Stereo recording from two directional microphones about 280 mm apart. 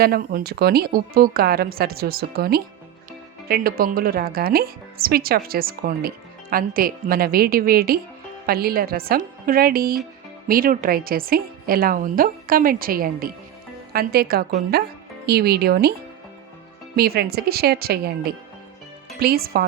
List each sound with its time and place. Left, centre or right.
0.0 s speech: right
16.9 s speech: right